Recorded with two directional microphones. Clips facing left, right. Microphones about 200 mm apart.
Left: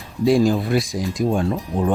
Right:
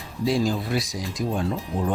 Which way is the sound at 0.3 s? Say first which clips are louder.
Left 7 dB; 55° left (ahead or behind).